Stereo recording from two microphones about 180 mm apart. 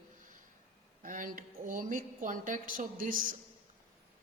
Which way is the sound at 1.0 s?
50° right (ahead or behind).